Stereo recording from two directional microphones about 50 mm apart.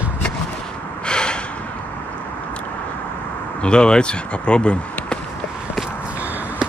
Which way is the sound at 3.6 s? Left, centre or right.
Centre.